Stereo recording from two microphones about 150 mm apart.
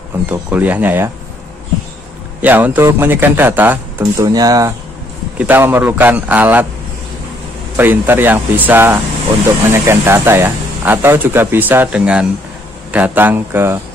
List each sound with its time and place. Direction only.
0.3 s speech: 10° right (ahead or behind)
2.4 s speech: 10° right (ahead or behind)
4.0 s speech: 25° right (ahead or behind)
5.4 s speech: 10° right (ahead or behind)
7.7 s speech: 15° right (ahead or behind)